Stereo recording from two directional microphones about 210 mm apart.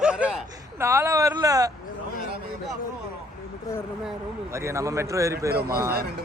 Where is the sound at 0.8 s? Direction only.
15° right (ahead or behind).